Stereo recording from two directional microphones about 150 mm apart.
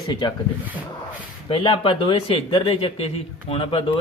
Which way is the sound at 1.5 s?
35° left (ahead or behind).